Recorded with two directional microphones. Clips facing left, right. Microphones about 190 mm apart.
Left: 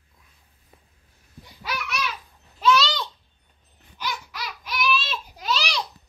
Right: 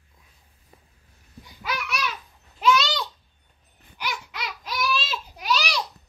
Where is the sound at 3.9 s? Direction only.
20° right (ahead or behind).